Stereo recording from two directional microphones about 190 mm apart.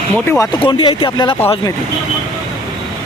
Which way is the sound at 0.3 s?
15° left (ahead or behind).